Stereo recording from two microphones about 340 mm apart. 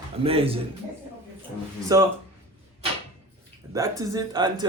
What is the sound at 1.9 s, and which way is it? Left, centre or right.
Speech, centre.